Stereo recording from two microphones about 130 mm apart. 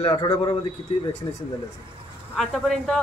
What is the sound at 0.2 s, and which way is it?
Speech, 40° left (ahead or behind).